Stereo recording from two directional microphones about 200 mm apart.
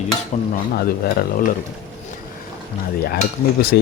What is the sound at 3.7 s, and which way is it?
Speech, 55° left (ahead or behind).